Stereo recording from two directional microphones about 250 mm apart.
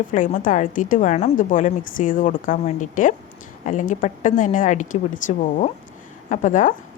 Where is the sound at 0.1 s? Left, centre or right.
Left.